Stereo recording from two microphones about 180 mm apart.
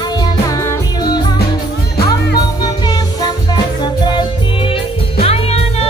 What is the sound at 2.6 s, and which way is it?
Music, 20° left (ahead or behind).